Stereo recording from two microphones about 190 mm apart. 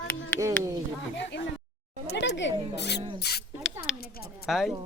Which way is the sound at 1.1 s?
70° left (ahead or behind).